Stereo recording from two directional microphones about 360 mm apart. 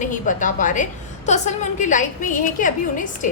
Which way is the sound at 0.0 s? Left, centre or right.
Left.